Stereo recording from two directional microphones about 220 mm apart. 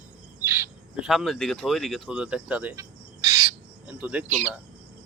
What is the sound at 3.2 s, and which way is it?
Bird, 20° right (ahead or behind).